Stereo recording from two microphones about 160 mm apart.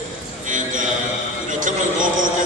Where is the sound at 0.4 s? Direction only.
55° right (ahead or behind).